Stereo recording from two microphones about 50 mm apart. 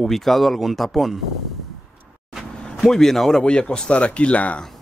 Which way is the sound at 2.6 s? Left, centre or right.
Centre.